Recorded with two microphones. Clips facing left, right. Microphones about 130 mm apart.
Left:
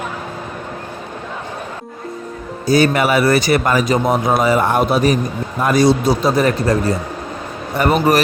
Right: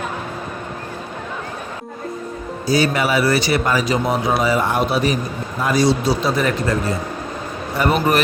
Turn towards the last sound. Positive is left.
turn(degrees=55)  # may be behind; listen again after turning